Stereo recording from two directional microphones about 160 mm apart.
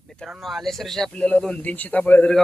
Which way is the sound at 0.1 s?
Centre (ahead or behind).